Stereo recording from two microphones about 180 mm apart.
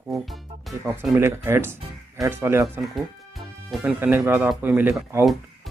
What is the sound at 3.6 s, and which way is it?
Speech, centre (ahead or behind).